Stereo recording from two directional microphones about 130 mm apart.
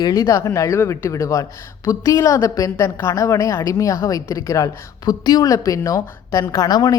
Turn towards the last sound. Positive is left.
turn(degrees=30)  # may be behind; listen again after turning